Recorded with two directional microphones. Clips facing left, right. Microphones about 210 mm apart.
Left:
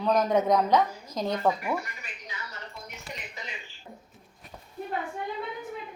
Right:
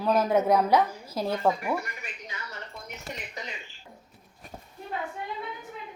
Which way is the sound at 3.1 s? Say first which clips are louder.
Right 3 dB; 40° right (ahead or behind).